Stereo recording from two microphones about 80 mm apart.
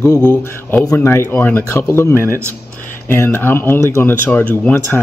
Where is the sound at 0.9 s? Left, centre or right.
Left.